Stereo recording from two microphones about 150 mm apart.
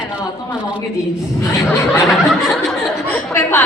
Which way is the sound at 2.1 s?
Centre (ahead or behind).